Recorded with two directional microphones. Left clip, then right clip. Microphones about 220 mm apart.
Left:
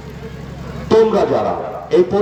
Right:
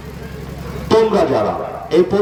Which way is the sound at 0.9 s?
30° right (ahead or behind).